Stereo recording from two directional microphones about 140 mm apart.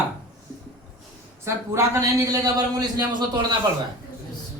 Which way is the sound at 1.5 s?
20° right (ahead or behind).